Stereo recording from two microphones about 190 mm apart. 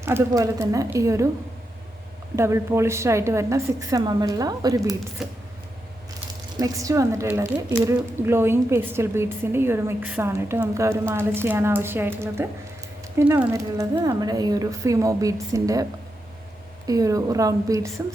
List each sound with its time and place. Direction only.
0.0 s a woman's voice: 15° right (ahead or behind)
2.3 s a woman's voice: 15° right (ahead or behind)
5.2 s speech: centre (ahead or behind)
6.6 s a woman's voice: 15° right (ahead or behind)